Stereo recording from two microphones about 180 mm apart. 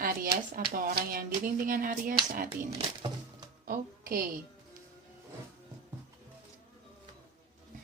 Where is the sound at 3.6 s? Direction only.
50° right (ahead or behind).